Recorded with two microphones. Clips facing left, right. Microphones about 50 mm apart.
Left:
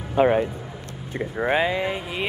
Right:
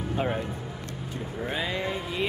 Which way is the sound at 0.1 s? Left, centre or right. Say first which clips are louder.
Left 11 dB; left.